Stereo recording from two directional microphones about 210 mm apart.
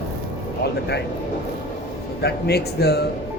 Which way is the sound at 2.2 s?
50° left (ahead or behind).